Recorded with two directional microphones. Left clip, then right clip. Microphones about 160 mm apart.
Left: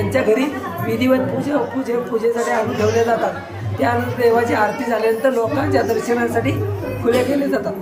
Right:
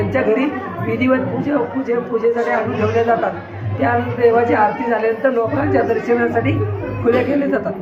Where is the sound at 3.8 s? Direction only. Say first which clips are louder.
Right 2 dB; 15° left (ahead or behind).